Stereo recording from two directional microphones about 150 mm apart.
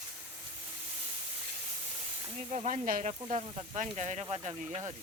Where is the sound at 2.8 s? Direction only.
60° right (ahead or behind); by 4.8 s 45° right (ahead or behind).